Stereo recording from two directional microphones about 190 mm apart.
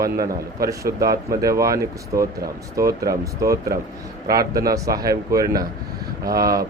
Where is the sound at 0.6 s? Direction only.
15° right (ahead or behind).